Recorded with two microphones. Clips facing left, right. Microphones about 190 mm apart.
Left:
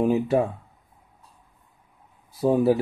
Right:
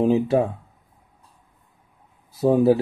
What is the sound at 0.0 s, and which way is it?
Speech, 25° right (ahead or behind).